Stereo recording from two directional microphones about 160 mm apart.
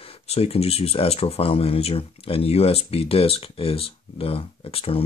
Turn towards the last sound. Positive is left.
turn(degrees=35)  # may be behind; listen again after turning